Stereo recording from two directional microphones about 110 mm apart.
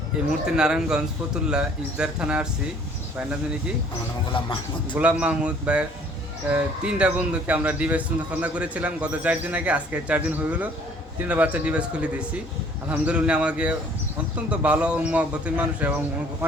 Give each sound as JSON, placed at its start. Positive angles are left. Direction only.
{"t": 0.3, "sound": "a man's voice", "side_deg": -5}
{"t": 4.3, "sound": "a sound", "side_deg": 50}
{"t": 4.9, "sound": "a man's voice", "side_deg": -10}